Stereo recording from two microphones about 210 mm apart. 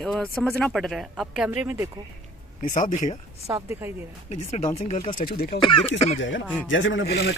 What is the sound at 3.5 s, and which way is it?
Speech, 15° right (ahead or behind).